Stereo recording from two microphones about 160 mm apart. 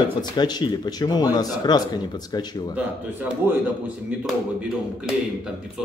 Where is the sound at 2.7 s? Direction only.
10° right (ahead or behind).